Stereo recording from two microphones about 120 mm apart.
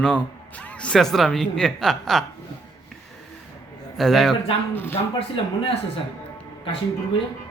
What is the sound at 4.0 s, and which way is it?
Speech, centre (ahead or behind).